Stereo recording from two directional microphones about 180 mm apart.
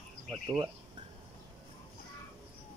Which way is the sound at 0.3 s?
20° right (ahead or behind).